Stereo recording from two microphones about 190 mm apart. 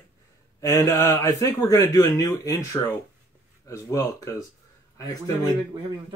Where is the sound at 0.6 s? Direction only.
15° left (ahead or behind).